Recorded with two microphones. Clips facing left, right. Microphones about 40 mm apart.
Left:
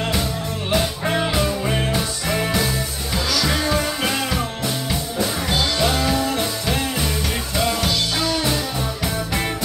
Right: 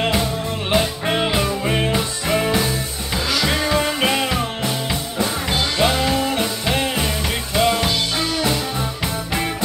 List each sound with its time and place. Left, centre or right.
0.7 s music: right
3.5 s music: right
5.8 s music: right